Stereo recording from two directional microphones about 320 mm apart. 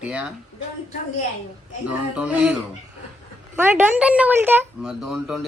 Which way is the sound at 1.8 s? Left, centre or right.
Centre.